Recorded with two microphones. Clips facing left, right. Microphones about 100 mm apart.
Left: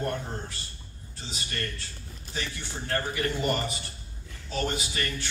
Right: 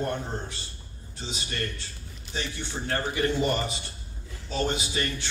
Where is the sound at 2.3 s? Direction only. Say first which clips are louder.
Right 2 dB; 25° right (ahead or behind).